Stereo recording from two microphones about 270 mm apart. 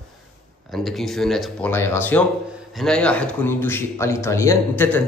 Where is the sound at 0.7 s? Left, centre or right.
Centre.